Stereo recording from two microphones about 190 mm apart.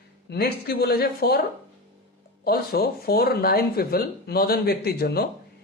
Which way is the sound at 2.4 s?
55° left (ahead or behind).